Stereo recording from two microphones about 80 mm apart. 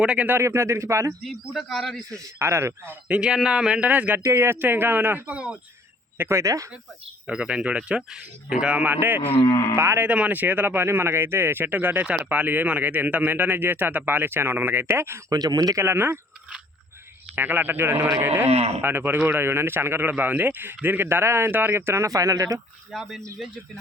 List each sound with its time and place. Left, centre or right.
0.0 s speech: centre
0.3 s speech: right
1.2 s a man's voice: centre
2.0 s speech: right
3.1 s speech: centre
4.2 s speech: right
7.3 s speech: centre
9.5 s speech: left
9.7 s speech: right
10.0 s speech: centre
15.3 s speech: right
15.8 s speech: right
17.3 s speech: right
22.9 s a man's voice: centre